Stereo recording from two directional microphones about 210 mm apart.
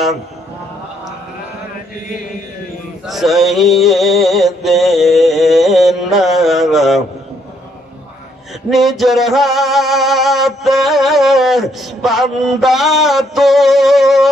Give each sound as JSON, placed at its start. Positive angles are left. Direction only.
{"t": 3.1, "sound": "mantra", "side_deg": 0}
{"t": 8.6, "sound": "music", "side_deg": 0}